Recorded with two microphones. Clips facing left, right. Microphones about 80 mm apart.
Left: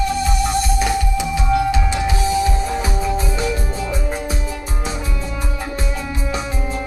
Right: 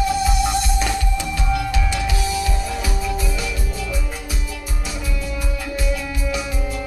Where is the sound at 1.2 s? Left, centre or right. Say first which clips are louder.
Left 5 dB; centre.